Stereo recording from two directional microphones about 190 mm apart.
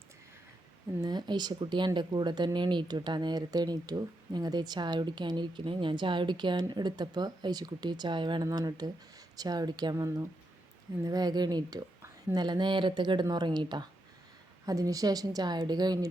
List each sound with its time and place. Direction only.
1.0 s speech: 20° right (ahead or behind)